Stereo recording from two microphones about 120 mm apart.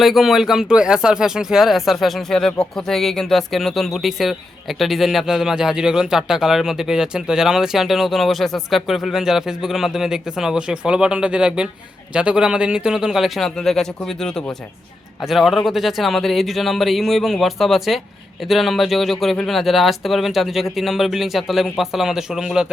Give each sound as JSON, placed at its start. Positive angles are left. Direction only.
{"t": 0.0, "sound": "speech", "side_deg": 0}